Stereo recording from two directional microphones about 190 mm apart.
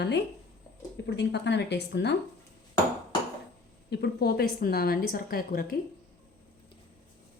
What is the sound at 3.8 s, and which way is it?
A woman's voice, 60° left (ahead or behind).